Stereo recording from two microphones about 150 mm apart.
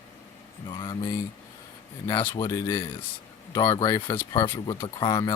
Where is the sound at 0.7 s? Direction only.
30° left (ahead or behind).